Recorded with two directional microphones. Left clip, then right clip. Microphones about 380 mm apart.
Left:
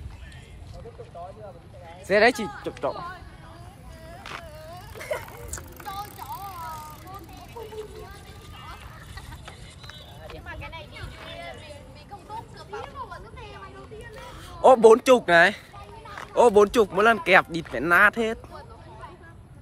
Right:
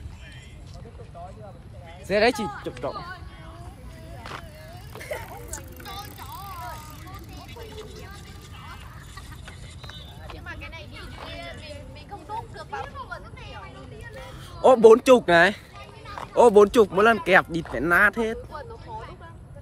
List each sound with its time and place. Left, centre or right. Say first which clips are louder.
2.0 s speech: left 2 dB; centre
2.9 s speech: left 1 dB; centre
4.2 s insect: even; centre
4.9 s vehicle: left 3 dB; centre
10.4 s vehicle: right 1 dB; centre
11.2 s a sound: right 1 dB; centre
12.3 s vehicle: right 4 dB; centre
14.1 s speech: even; centre